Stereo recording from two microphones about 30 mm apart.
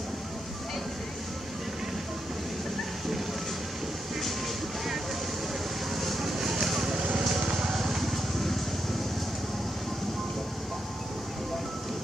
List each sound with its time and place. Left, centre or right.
5.9 s vehicle: centre
6.9 s vehicle: right
7.2 s music: centre